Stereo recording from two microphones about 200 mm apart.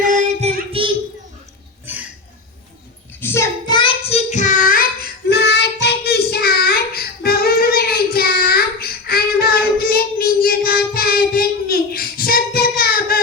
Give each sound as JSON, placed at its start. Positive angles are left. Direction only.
{"t": 0.0, "sound": "child singing", "side_deg": -40}
{"t": 0.8, "sound": "a sound", "side_deg": -25}
{"t": 1.9, "sound": "a sound", "side_deg": -10}
{"t": 3.2, "sound": "child singing", "side_deg": 10}
{"t": 4.3, "sound": "child singing", "side_deg": 40}
{"t": 5.3, "sound": "child singing", "side_deg": 55}